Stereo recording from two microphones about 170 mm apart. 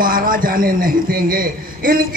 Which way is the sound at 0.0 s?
55° right (ahead or behind).